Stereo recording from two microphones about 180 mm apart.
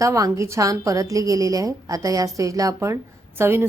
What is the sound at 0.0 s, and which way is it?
A woman's voice, 15° right (ahead or behind).